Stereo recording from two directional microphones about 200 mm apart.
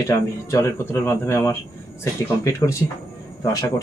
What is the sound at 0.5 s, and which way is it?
Speech, 15° left (ahead or behind).